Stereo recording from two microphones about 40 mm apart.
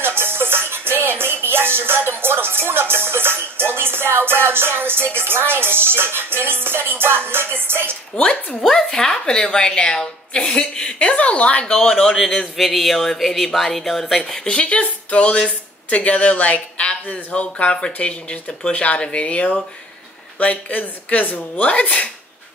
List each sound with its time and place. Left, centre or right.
0.0 s music: right
8.2 s speech: left
8.6 s a woman's voice: centre
9.0 s a woman's voice: centre
12.5 s speech: centre
14.3 s a woman's voice: centre
14.6 s speech: left
20.3 s speech: left